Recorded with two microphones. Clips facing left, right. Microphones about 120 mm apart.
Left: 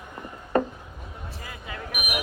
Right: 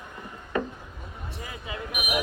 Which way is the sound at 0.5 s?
40° left (ahead or behind).